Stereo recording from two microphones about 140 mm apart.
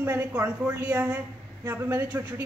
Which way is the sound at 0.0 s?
15° right (ahead or behind).